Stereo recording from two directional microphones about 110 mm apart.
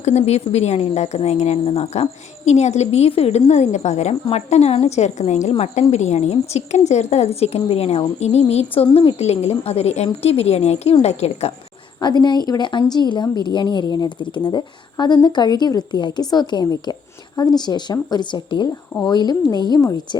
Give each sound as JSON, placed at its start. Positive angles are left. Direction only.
{"t": 0.0, "sound": "speech", "side_deg": 90}
{"t": 9.2, "sound": "a woman's voice", "side_deg": 75}
{"t": 12.0, "sound": "a woman's voice", "side_deg": 40}